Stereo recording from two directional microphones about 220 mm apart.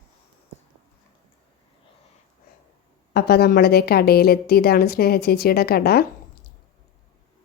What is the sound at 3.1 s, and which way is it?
A woman's voice, 45° left (ahead or behind).